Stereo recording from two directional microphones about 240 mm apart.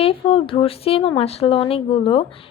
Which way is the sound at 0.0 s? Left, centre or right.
Left.